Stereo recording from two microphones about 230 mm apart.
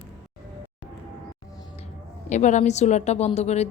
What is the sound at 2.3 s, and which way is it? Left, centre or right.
A woman's voice, left.